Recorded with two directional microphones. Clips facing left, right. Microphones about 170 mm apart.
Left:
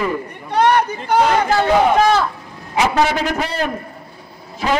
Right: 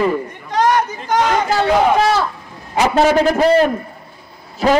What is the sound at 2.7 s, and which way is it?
Speech, 40° right (ahead or behind).